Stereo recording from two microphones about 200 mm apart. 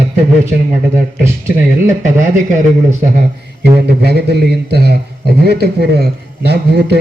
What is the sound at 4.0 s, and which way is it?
A man's voice, 55° right (ahead or behind).